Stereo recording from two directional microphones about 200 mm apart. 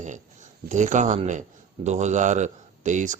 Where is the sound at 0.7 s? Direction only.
35° right (ahead or behind).